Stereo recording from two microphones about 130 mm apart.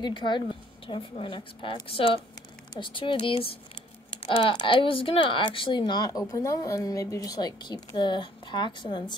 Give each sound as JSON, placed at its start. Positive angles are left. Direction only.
{"t": 0.0, "sound": "speech", "side_deg": 35}